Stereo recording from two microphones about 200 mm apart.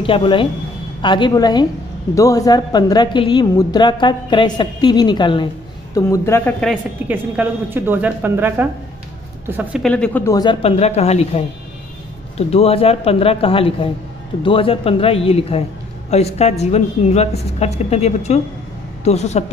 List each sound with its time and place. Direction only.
0.0 s a woman's voice: 25° left (ahead or behind)
6.6 s a woman's voice: 5° right (ahead or behind); by 19.4 s 35° left (ahead or behind)